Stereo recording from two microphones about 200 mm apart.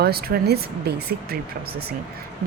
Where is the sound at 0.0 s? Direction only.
50° right (ahead or behind).